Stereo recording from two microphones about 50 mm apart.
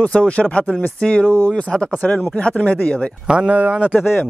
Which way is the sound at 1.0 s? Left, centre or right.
Left.